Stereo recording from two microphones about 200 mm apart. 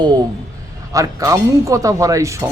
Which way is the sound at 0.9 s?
15° right (ahead or behind).